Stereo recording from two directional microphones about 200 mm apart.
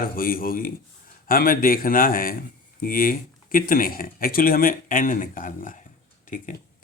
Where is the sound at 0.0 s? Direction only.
45° left (ahead or behind).